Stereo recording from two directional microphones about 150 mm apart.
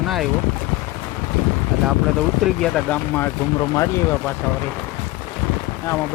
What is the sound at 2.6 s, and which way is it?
Speech, 5° left (ahead or behind).